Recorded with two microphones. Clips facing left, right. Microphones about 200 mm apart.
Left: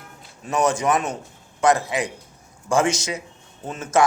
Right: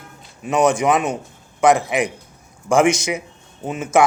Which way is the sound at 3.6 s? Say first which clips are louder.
Right 4 dB; 15° right (ahead or behind).